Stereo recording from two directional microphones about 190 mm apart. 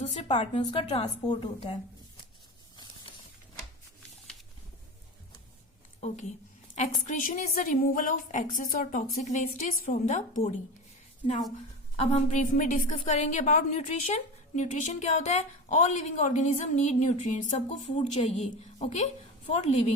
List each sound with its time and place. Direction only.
0.0 s a woman's voice: 30° left (ahead or behind)
6.7 s a woman's voice: 45° left (ahead or behind)
11.9 s a woman's voice: 40° left (ahead or behind)